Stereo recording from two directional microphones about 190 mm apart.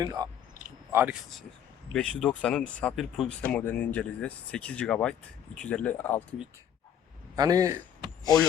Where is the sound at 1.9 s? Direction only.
5° left (ahead or behind).